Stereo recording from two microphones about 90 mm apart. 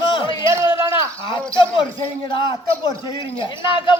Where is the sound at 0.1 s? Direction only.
70° left (ahead or behind).